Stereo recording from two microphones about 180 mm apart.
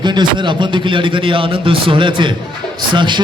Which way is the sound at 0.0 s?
25° right (ahead or behind).